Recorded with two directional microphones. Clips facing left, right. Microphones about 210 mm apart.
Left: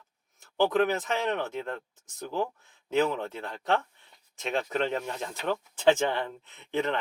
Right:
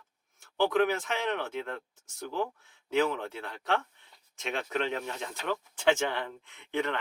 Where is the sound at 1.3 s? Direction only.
40° left (ahead or behind).